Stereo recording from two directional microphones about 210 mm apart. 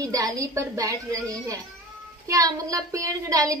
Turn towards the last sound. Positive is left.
turn(degrees=-15)  # may be behind; listen again after turning